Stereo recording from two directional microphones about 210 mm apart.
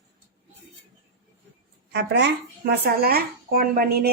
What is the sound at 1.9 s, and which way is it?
A woman's voice, 55° right (ahead or behind).